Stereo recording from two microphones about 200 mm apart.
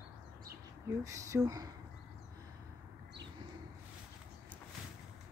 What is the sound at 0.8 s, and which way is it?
Speech, 15° right (ahead or behind).